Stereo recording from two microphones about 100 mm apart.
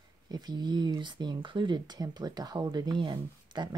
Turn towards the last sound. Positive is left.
turn(degrees=-50)  # may be behind; listen again after turning